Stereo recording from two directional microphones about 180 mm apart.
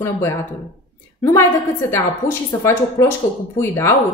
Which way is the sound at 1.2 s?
15° left (ahead or behind).